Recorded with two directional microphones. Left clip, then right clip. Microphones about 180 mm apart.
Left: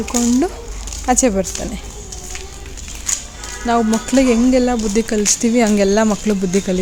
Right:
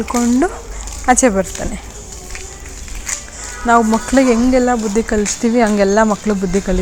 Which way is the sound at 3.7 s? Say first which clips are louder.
Right 5 dB; centre (ahead or behind).